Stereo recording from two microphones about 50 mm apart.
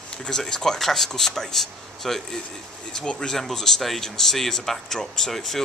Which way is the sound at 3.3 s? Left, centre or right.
Centre.